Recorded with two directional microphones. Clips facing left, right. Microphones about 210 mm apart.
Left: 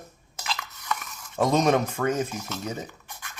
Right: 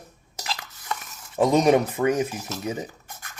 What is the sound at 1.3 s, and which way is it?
Speech, 15° right (ahead or behind).